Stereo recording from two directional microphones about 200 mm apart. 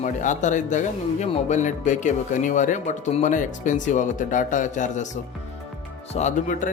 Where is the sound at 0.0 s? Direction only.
40° left (ahead or behind).